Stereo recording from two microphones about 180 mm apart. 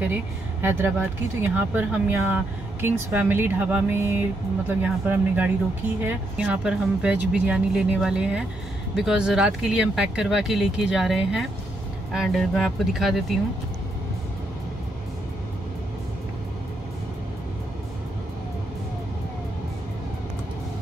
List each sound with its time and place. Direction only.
0.1 s speech: 10° right (ahead or behind)